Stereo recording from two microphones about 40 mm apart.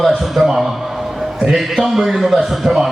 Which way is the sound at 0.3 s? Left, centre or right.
Centre.